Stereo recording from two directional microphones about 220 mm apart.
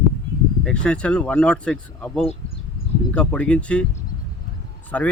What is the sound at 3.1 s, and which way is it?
Speech, 5° left (ahead or behind).